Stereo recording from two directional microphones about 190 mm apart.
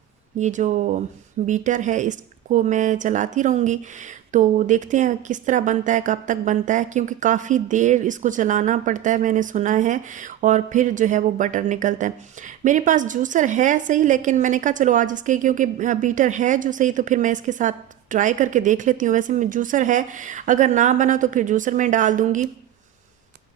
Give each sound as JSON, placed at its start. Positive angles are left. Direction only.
{"t": 0.3, "sound": "speech", "side_deg": -40}